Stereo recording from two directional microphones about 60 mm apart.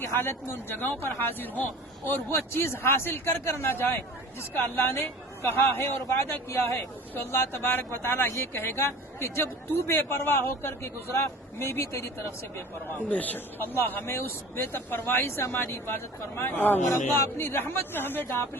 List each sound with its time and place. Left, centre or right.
0.2 s a man's voice: left
13.1 s a man's voice: left